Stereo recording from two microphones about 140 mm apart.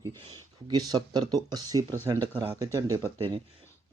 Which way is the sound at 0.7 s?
30° right (ahead or behind).